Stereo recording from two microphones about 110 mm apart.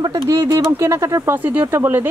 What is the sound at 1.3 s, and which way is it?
Speech, 15° right (ahead or behind).